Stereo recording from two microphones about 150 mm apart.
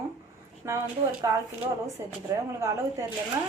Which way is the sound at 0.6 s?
20° right (ahead or behind).